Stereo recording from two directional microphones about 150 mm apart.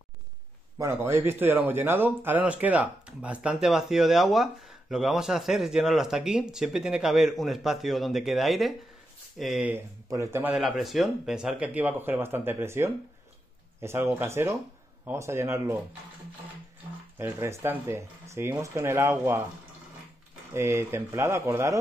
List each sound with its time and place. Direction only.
0.7 s speech: 20° right (ahead or behind)
10.5 s a man's voice: centre (ahead or behind); by 15.8 s 20° right (ahead or behind)
17.2 s speech: 15° right (ahead or behind)
20.5 s speech: 15° right (ahead or behind)